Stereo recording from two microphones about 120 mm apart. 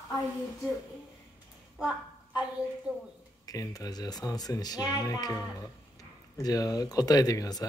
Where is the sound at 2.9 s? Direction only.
15° right (ahead or behind).